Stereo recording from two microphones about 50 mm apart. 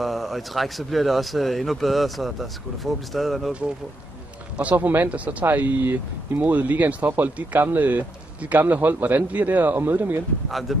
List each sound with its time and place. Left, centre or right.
0.0 s speech: centre
4.7 s a man's voice: right
6.4 s a man's voice: right
10.7 s speech: centre